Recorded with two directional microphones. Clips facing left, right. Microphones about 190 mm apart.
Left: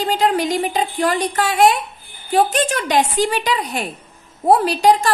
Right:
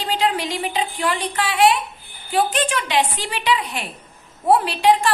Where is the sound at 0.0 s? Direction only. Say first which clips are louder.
Left 4 dB; 45° left (ahead or behind).